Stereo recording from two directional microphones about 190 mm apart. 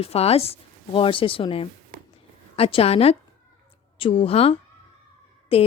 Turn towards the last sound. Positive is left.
turn(degrees=30)  # may be behind; listen again after turning